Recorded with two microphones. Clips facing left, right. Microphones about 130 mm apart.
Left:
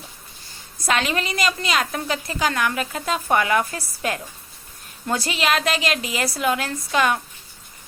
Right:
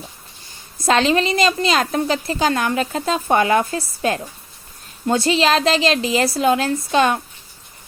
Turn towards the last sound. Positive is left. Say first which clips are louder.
# right 4 dB
turn(degrees=-30)  # may be behind; listen again after turning